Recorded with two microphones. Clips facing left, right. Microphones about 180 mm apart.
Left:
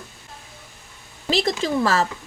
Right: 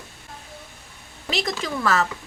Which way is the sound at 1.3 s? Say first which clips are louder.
Left 5 dB; 30° left (ahead or behind).